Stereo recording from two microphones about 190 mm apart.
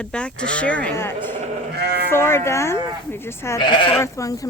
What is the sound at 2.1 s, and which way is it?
Speech, 15° left (ahead or behind).